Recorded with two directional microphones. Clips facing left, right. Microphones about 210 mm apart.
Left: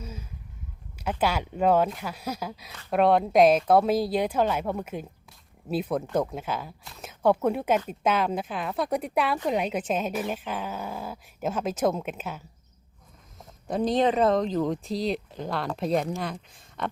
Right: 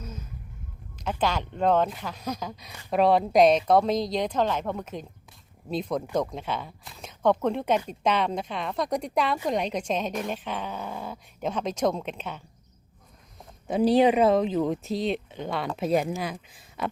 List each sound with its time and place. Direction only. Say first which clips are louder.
0.0 s vehicle: even; 10° left (ahead or behind)
0.9 s a woman's voice: left 1 dB; 10° left (ahead or behind)
13.7 s speech: right 3 dB; 5° right (ahead or behind)